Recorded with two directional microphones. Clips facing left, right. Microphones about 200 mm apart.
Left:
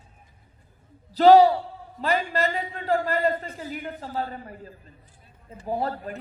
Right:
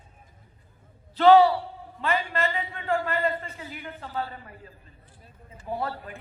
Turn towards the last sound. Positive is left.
turn(degrees=40)  # may be behind; listen again after turning